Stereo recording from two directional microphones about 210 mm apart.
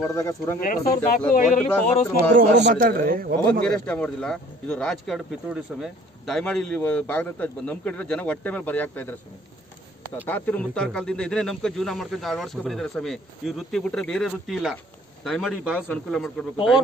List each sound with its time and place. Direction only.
0.0 s speech: 15° left (ahead or behind)
0.6 s speech: 40° left (ahead or behind)
2.6 s a man's voice: 45° right (ahead or behind)
3.6 s speech: 5° left (ahead or behind)
10.2 s speech: 10° left (ahead or behind)